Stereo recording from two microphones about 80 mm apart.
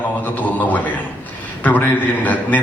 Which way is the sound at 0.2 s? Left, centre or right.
Left.